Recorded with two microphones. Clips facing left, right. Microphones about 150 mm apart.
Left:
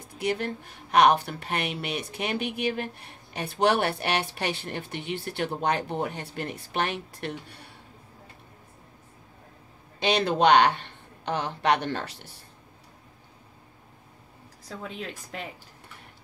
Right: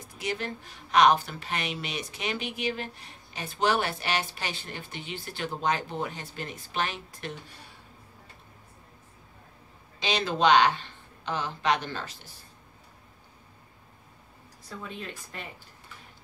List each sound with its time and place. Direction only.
0.2 s speech: 55° left (ahead or behind)
9.9 s speech: 60° left (ahead or behind)
14.8 s a woman's voice: 90° left